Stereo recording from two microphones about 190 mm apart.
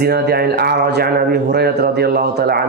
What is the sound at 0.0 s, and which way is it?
A man's voice, 60° right (ahead or behind).